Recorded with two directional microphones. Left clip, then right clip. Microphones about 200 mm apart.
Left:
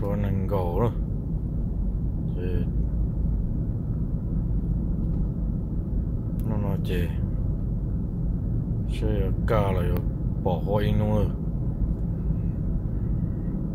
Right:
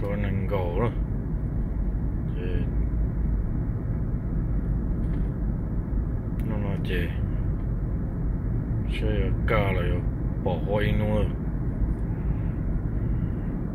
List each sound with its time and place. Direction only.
0.1 s music: 20° left (ahead or behind)
6.7 s vehicle: 20° left (ahead or behind)
9.0 s speech: 15° left (ahead or behind)